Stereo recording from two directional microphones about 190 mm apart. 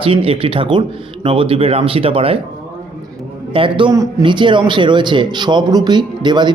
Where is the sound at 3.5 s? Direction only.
25° right (ahead or behind).